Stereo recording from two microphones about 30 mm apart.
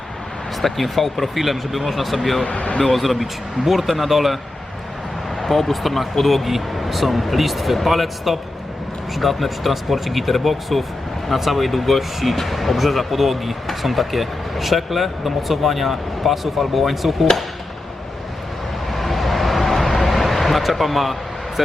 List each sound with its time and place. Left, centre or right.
0.6 s speech: centre
2.5 s speech: left
2.8 s speech: centre
5.4 s speech: centre
18.9 s a sound: centre